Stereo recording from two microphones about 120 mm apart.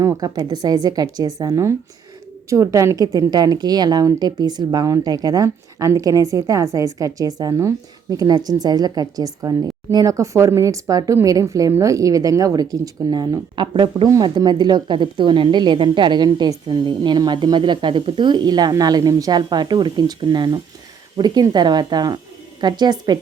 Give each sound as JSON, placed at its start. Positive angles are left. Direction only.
{"t": 0.0, "sound": "a woman's voice", "side_deg": -30}